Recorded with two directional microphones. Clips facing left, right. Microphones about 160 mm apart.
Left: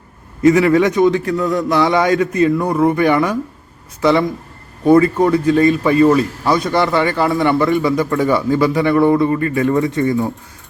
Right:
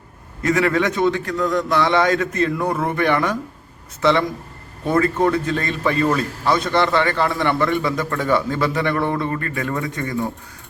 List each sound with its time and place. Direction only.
0.4 s a man's voice: 15° left (ahead or behind)